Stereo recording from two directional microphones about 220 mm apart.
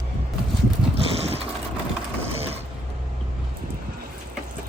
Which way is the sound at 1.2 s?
25° right (ahead or behind).